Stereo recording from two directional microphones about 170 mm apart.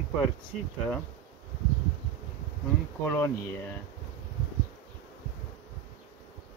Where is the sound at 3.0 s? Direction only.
10° left (ahead or behind).